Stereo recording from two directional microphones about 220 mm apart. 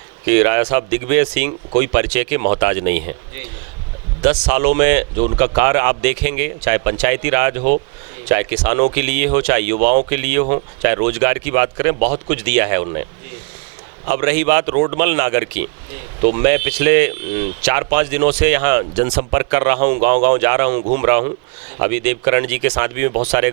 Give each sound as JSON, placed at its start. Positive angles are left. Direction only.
{"t": 0.3, "sound": "speech", "side_deg": -15}
{"t": 4.2, "sound": "speech", "side_deg": -10}
{"t": 14.1, "sound": "speech", "side_deg": -15}